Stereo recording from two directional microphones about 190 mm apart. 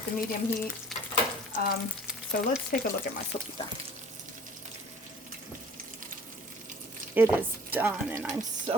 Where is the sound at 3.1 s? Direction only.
50° left (ahead or behind).